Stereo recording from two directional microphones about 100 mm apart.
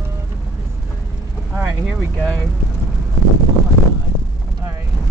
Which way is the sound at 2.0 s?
15° left (ahead or behind).